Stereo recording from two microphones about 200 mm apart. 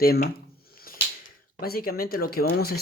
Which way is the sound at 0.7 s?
45° left (ahead or behind).